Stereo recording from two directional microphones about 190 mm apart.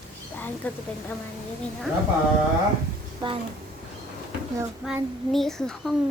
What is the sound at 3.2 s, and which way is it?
Speech, 25° right (ahead or behind).